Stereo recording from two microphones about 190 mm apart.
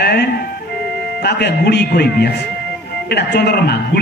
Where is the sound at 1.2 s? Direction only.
60° left (ahead or behind).